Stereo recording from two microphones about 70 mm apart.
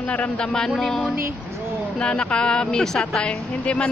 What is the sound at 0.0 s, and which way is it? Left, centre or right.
Speech, centre.